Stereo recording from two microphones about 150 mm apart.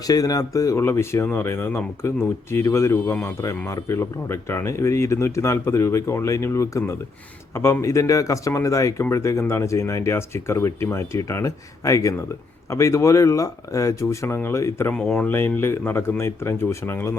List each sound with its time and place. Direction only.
0.1 s speech: 25° left (ahead or behind)